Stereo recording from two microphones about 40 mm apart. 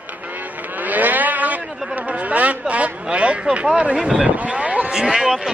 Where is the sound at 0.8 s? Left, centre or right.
Right.